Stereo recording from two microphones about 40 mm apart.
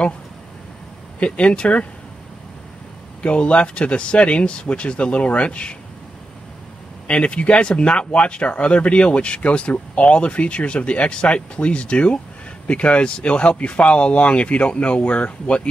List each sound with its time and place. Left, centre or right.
1.2 s speech: left
3.2 s speech: left
7.1 s speech: left